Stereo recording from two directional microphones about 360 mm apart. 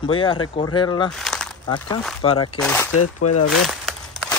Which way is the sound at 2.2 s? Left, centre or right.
Centre.